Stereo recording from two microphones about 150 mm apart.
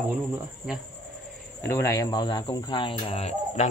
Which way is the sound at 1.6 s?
20° left (ahead or behind).